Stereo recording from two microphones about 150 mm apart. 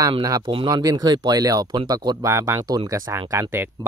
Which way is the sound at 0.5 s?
35° right (ahead or behind).